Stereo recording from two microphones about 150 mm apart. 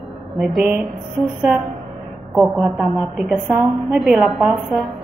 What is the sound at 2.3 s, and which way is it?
A woman's voice, centre (ahead or behind).